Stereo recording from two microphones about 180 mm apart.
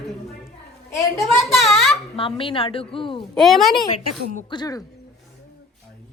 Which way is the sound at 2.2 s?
30° left (ahead or behind).